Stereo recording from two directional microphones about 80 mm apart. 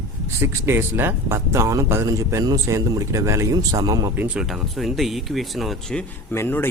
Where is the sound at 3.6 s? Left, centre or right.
Right.